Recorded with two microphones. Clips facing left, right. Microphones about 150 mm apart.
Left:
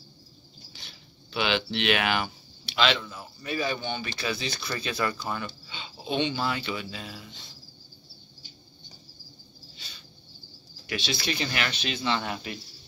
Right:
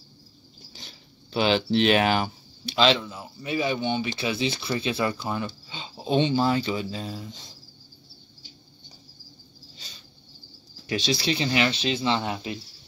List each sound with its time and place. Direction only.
0.7 s speech: 40° right (ahead or behind)
10.9 s speech: 35° right (ahead or behind)